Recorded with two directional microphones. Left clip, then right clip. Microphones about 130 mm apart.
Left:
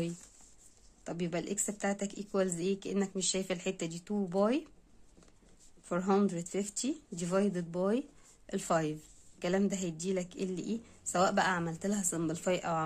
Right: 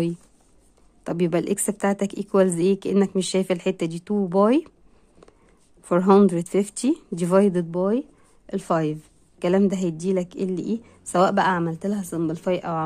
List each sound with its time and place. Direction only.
1.0 s a woman's voice: 65° right (ahead or behind)
5.9 s a woman's voice: 60° right (ahead or behind)
7.7 s speech: 35° right (ahead or behind)
9.4 s a woman's voice: 50° right (ahead or behind); by 12.8 s 30° right (ahead or behind)